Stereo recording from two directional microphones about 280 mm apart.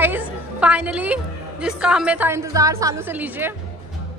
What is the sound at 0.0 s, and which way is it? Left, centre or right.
A woman's voice, centre.